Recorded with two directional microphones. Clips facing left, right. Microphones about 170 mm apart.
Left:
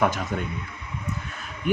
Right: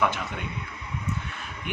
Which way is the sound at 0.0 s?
40° left (ahead or behind).